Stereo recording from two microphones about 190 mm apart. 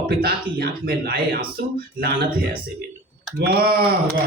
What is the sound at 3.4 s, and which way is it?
Speech, 55° right (ahead or behind).